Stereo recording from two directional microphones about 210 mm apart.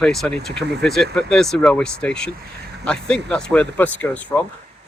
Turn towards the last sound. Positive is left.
turn(degrees=5)  # may be behind; listen again after turning